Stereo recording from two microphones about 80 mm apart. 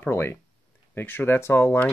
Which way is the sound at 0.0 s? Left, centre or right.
Left.